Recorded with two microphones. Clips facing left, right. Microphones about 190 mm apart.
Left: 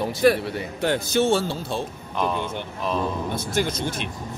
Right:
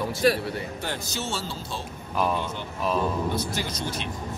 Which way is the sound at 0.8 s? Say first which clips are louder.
Left 11 dB; 60° left (ahead or behind).